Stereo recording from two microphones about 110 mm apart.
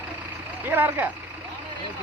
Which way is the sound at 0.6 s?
15° right (ahead or behind).